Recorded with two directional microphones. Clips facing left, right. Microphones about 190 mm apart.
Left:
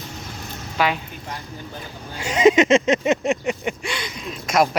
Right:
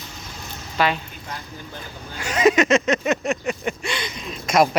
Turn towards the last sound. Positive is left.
turn(degrees=5)  # may be behind; listen again after turning